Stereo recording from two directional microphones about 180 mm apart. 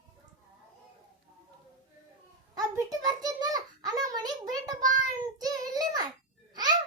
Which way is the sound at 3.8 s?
20° right (ahead or behind).